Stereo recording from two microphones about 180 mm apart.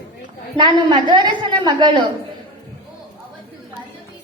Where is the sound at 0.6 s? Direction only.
25° right (ahead or behind).